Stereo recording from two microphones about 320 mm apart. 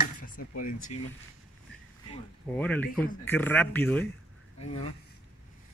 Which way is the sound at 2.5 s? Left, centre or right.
Centre.